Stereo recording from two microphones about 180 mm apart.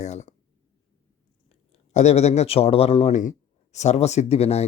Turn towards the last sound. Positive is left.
turn(degrees=35)  # may be behind; listen again after turning